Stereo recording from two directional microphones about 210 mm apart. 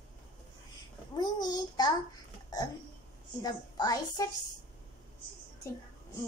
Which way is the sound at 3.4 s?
20° left (ahead or behind).